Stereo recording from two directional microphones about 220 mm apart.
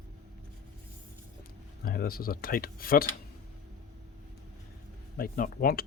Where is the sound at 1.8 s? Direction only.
45° left (ahead or behind).